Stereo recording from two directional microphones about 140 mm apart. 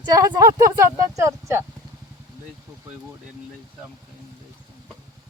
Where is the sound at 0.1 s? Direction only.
25° right (ahead or behind).